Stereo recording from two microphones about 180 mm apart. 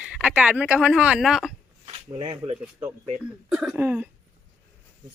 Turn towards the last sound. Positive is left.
turn(degrees=-10)  # may be behind; listen again after turning